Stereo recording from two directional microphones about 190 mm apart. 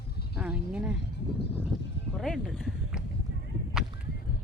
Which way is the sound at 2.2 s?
Centre (ahead or behind).